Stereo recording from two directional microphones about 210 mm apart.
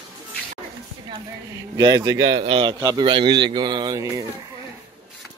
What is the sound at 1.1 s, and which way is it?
Speech, 20° right (ahead or behind).